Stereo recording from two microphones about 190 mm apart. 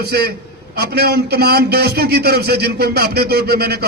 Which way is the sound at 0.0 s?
55° right (ahead or behind).